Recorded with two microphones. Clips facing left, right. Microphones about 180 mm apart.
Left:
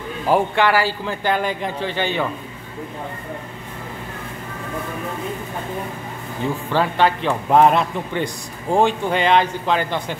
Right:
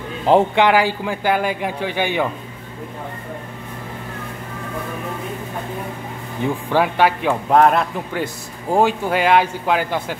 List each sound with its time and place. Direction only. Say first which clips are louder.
0.3 s a man's voice: right 3 dB; 20° right (ahead or behind)
6.4 s a man's voice: right 2 dB; 15° right (ahead or behind)